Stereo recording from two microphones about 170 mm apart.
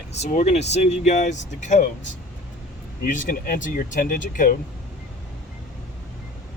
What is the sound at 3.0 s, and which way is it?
Speech, 50° left (ahead or behind).